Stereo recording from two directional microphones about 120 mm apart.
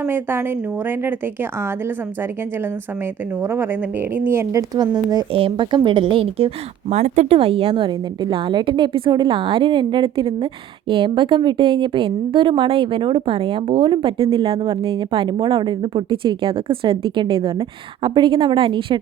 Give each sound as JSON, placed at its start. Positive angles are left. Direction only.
{"t": 0.0, "sound": "a woman's voice", "side_deg": -20}
{"t": 3.4, "sound": "speech", "side_deg": -20}
{"t": 5.3, "sound": "a woman's voice", "side_deg": -50}
{"t": 6.9, "sound": "a woman's voice", "side_deg": -65}